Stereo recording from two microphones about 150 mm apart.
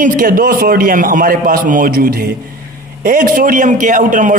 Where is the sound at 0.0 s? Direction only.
60° right (ahead or behind); by 2.1 s 80° right.